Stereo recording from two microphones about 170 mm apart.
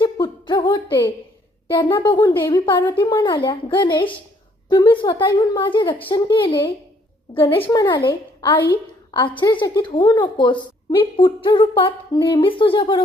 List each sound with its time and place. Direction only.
0.0 s a sound: 25° left (ahead or behind)
1.7 s a woman's voice: 30° left (ahead or behind)
7.4 s a woman's voice: 15° left (ahead or behind)